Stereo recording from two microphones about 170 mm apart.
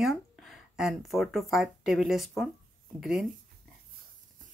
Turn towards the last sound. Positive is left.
turn(degrees=0)  # may be behind; listen again after turning